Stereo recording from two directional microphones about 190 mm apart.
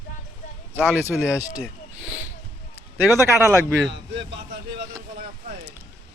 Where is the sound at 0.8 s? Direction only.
10° right (ahead or behind).